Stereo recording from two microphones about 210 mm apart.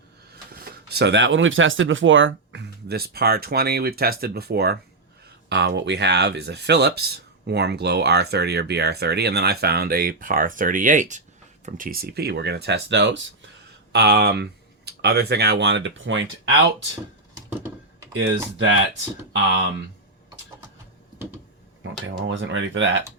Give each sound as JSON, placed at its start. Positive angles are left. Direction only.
{"t": 0.6, "sound": "speech", "side_deg": -50}
{"t": 18.5, "sound": "speech", "side_deg": -65}
{"t": 22.3, "sound": "speech", "side_deg": -65}